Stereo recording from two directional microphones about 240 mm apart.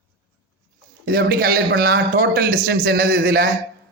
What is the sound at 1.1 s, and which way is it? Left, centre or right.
A man's voice, right.